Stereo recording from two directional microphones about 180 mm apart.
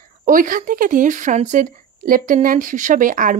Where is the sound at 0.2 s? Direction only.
50° right (ahead or behind).